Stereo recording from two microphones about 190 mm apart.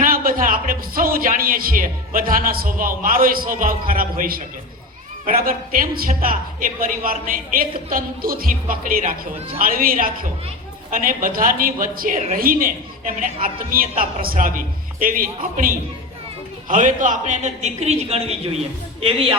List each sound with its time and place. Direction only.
0.0 s a man's voice: 45° right (ahead or behind); by 19.3 s 30° right (ahead or behind)